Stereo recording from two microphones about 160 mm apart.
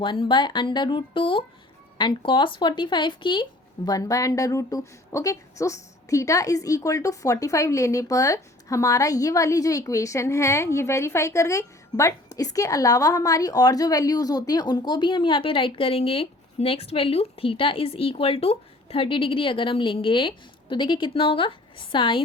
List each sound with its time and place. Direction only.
0.0 s speech: 30° left (ahead or behind)